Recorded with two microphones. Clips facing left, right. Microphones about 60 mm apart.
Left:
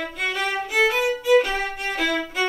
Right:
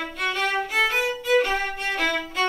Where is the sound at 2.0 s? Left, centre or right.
Centre.